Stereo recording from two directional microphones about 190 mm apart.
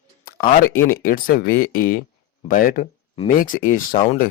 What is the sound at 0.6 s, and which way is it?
Speech, 50° left (ahead or behind).